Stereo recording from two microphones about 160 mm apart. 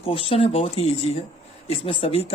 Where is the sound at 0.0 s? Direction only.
35° left (ahead or behind).